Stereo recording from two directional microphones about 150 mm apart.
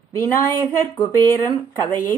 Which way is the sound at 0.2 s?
15° left (ahead or behind).